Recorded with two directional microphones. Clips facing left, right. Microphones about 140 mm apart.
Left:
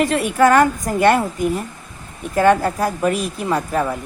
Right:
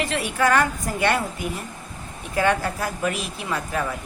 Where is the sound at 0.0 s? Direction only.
45° left (ahead or behind).